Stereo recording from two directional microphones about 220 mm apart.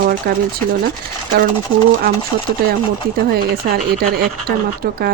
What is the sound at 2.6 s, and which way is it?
Speech, 45° right (ahead or behind).